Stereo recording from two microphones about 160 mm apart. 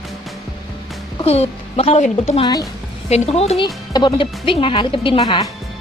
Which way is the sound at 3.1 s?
40° left (ahead or behind).